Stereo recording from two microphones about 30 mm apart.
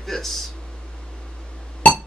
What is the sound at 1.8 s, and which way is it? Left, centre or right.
Music, left.